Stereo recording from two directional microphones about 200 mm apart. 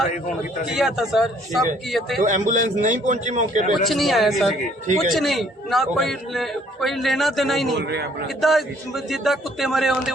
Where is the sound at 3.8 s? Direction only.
Centre (ahead or behind).